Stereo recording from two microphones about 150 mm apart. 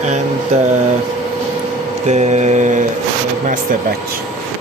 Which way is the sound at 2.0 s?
50° right (ahead or behind).